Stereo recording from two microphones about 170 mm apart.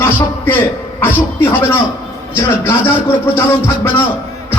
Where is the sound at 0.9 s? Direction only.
15° left (ahead or behind).